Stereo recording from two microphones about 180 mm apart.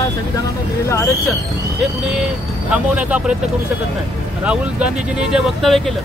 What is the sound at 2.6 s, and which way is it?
Speech, 5° right (ahead or behind).